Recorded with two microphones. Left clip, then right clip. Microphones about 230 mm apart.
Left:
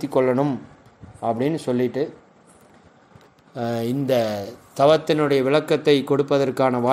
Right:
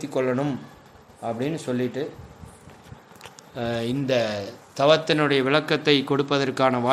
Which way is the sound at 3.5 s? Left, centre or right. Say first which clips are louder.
Left 2 dB; left.